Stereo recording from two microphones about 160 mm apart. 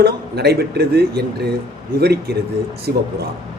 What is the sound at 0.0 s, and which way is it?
A man's voice, 85° right.